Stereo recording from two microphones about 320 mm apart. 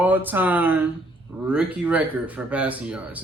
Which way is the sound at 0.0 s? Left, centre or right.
Centre.